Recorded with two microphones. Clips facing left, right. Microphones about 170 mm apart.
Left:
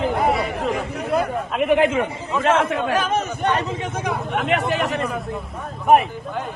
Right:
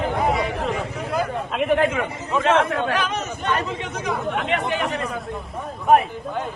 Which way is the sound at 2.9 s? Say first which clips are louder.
Left 4 dB; 45° left (ahead or behind).